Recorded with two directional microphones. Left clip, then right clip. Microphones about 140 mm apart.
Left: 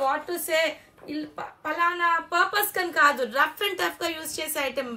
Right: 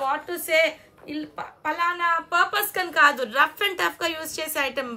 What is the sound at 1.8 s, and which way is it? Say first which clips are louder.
Speech: even; 10° right (ahead or behind).